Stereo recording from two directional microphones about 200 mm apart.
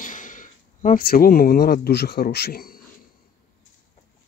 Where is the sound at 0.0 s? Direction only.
40° left (ahead or behind).